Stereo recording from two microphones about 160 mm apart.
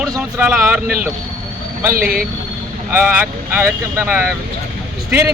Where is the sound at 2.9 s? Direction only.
10° right (ahead or behind).